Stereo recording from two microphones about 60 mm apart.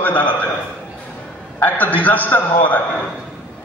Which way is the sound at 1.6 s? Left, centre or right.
Left.